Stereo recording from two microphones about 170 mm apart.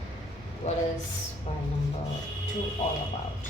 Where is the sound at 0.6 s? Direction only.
45° left (ahead or behind).